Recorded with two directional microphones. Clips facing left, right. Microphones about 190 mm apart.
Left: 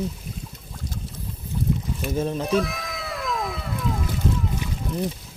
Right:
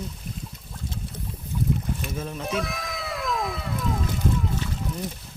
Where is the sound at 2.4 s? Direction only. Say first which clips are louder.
Left 5 dB; centre (ahead or behind).